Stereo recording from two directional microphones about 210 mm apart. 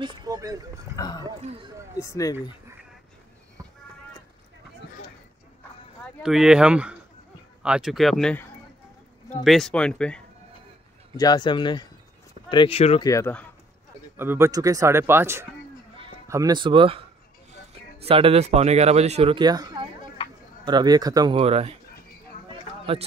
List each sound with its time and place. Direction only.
0.0 s speech: 20° right (ahead or behind)
0.9 s speech: 20° left (ahead or behind)
6.2 s speech: 5° right (ahead or behind)
11.1 s speech: 20° left (ahead or behind)
13.1 s speech: 10° left (ahead or behind)
14.1 s speech: 10° right (ahead or behind); by 21.7 s 30° right (ahead or behind)